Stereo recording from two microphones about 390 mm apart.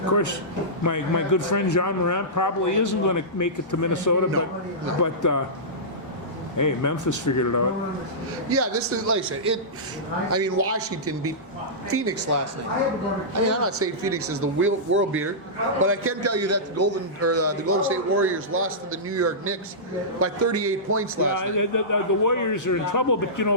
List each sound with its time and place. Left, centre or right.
0.1 s a man's voice: left
6.6 s a man's voice: left
8.4 s a man's voice: right
10.3 s a man's voice: right
21.3 s a man's voice: left